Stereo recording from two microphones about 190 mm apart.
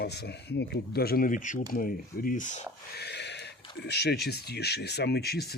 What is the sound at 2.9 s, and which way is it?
Speech, 60° left (ahead or behind).